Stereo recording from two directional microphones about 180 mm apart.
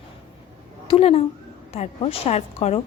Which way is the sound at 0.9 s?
35° left (ahead or behind).